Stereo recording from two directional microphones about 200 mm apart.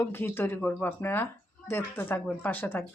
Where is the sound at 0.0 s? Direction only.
10° left (ahead or behind).